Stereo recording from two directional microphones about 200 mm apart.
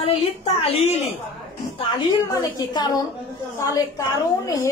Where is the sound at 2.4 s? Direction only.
20° left (ahead or behind).